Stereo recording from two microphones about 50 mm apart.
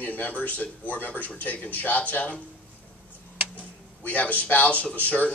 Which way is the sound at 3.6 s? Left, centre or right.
Left.